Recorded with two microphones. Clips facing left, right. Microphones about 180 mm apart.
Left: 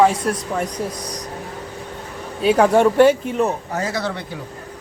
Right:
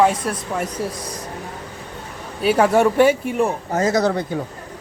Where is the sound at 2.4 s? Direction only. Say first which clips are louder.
Left 1 dB; 5° right (ahead or behind).